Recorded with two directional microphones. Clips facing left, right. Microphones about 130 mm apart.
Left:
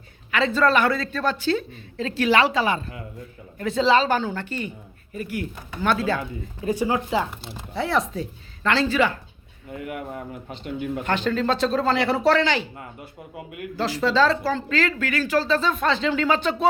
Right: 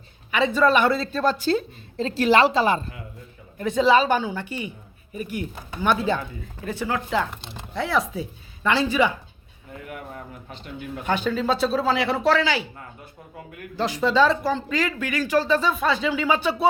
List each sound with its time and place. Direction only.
0.3 s speech: 15° right (ahead or behind)
0.9 s speech: 30° right (ahead or behind)
3.6 s speech: 15° right (ahead or behind)
6.7 s speech: 15° left (ahead or behind); by 9.1 s 15° right (ahead or behind)
11.0 s speech: 10° right (ahead or behind)
13.7 s speech: 20° right (ahead or behind)